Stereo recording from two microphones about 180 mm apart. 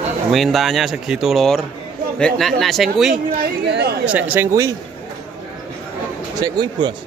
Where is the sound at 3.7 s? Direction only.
65° right (ahead or behind).